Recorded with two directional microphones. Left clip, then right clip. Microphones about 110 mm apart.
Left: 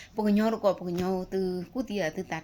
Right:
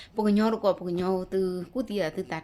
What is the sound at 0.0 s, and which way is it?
A woman's voice, 30° right (ahead or behind).